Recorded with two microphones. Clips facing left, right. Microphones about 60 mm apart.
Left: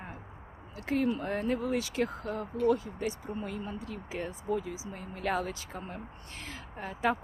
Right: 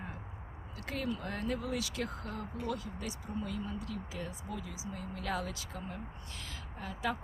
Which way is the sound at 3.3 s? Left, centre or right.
Left.